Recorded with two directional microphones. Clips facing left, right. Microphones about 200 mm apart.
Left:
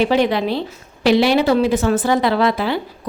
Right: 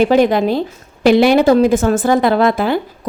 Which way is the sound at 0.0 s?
45° right (ahead or behind).